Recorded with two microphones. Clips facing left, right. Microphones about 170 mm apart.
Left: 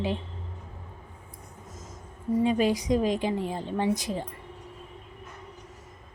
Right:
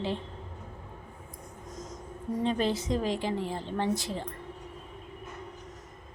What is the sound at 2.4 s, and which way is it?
A woman's voice, 10° left (ahead or behind).